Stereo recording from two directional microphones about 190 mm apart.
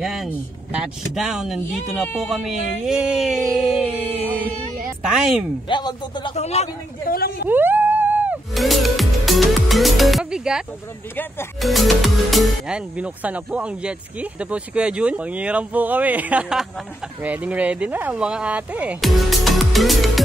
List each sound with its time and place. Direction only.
0.0 s speech: centre (ahead or behind)
5.7 s a man's voice: 25° left (ahead or behind)
7.1 s a woman's voice: 55° left (ahead or behind)
7.4 s music: 10° right (ahead or behind)
11.6 s speech: centre (ahead or behind)